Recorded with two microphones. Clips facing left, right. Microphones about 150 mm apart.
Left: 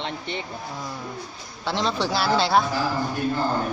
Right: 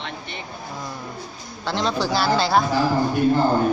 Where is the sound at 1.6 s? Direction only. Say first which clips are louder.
Right 2 dB; centre (ahead or behind).